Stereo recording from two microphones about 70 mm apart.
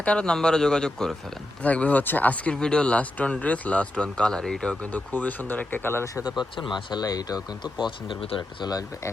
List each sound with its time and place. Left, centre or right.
0.0 s speech: centre
1.6 s speech: centre
4.8 s speech: left
6.6 s speech: left
8.4 s speech: left